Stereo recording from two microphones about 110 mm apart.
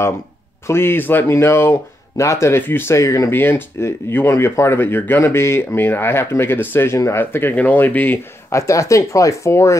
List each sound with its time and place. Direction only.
0.7 s speech: 20° left (ahead or behind)
8.5 s speech: 30° left (ahead or behind)